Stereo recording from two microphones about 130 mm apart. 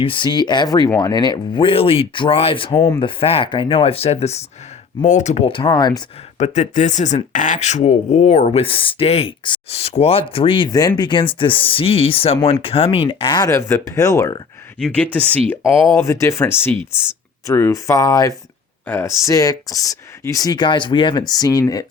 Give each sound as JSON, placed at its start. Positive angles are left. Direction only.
{"t": 0.0, "sound": "speech", "side_deg": 40}
{"t": 1.6, "sound": "speech", "side_deg": 45}
{"t": 5.0, "sound": "speech", "side_deg": 65}
{"t": 6.3, "sound": "speech", "side_deg": 65}
{"t": 8.6, "sound": "speech", "side_deg": 45}
{"t": 10.7, "sound": "speech", "side_deg": 30}
{"t": 14.8, "sound": "speech", "side_deg": 5}